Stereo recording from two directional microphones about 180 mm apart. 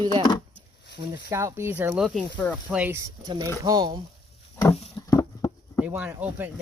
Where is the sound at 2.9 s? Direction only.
20° right (ahead or behind).